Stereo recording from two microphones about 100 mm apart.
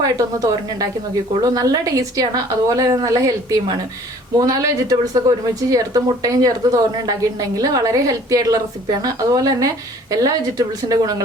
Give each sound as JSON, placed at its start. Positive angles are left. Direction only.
{"t": 0.0, "sound": "a woman's voice", "side_deg": -35}